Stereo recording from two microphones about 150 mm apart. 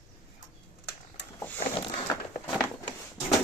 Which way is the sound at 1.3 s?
15° left (ahead or behind).